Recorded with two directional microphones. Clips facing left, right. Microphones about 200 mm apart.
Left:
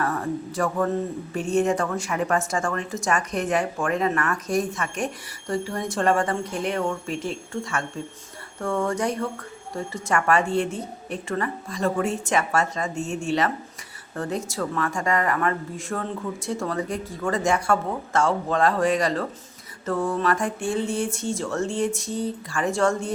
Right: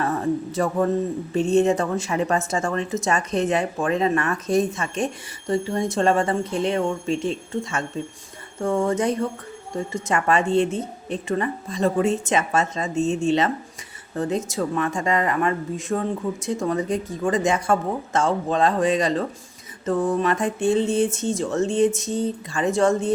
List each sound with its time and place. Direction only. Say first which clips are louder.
0.0 s speech: right 3 dB; 25° right (ahead or behind)